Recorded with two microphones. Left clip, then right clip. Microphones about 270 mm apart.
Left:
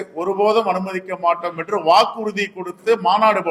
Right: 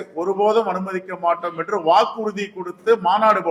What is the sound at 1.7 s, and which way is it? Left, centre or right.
Speech, centre.